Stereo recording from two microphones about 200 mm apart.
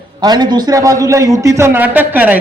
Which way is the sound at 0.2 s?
20° right (ahead or behind).